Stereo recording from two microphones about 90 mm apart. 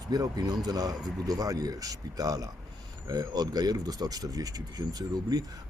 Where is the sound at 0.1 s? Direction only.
45° right (ahead or behind).